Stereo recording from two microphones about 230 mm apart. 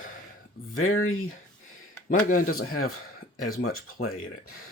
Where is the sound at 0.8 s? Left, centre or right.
Left.